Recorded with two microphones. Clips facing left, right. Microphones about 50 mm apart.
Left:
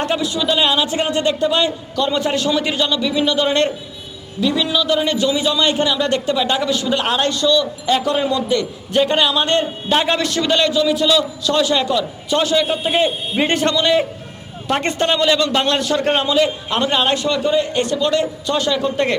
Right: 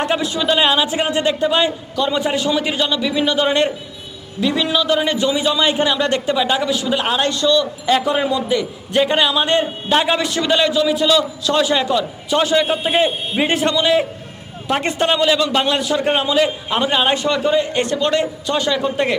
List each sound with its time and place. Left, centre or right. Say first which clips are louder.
0.2 s a man's voice: right 1 dB; right
4.4 s a man's voice: even; right
6.1 s a man's voice: right 1 dB; centre
6.7 s a man's voice: even; right
6.9 s a man's voice: even; centre
7.3 s a man's voice: even; right
7.9 s a man's voice: right 1 dB; centre
10.2 s a man's voice: even; right
12.9 s a man's voice: right 1 dB; centre
17.2 s a man's voice: right 1 dB; right
18.7 s a man's voice: even; centre